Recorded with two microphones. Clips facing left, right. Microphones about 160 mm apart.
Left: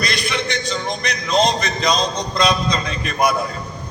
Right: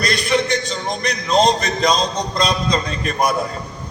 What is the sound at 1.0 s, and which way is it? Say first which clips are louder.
Speech: right 3 dB; 40° right (ahead or behind).